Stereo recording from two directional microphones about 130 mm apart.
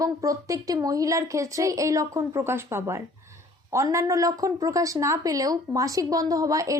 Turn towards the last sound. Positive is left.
turn(degrees=-25)  # may be behind; listen again after turning